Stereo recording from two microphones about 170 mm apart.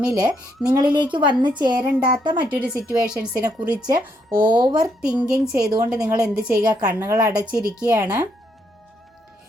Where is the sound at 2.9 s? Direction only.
10° right (ahead or behind).